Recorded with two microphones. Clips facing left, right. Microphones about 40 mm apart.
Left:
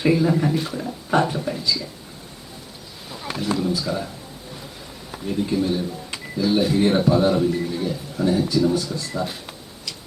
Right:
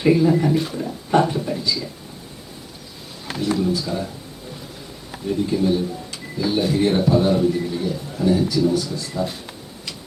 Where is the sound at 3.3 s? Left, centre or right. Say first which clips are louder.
Right 2 dB; centre.